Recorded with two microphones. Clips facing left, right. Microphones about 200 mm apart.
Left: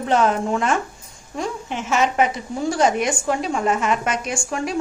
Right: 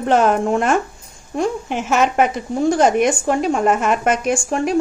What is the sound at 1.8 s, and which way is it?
A woman's voice, 55° right (ahead or behind).